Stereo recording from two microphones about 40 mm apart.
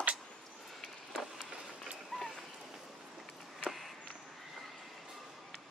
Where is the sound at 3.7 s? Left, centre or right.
Centre.